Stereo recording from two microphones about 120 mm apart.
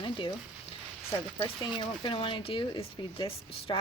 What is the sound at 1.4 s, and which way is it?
Speech, 40° left (ahead or behind).